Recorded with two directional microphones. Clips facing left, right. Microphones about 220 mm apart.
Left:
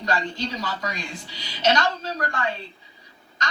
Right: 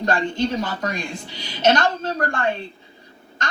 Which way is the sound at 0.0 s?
50° right (ahead or behind).